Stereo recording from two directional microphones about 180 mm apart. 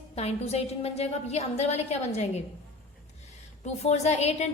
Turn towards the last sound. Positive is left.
turn(degrees=40)  # may be behind; listen again after turning